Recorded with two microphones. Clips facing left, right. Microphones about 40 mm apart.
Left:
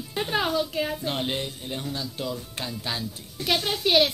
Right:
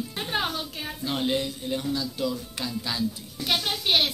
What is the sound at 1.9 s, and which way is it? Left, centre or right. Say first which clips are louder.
Speech: right 2 dB; left.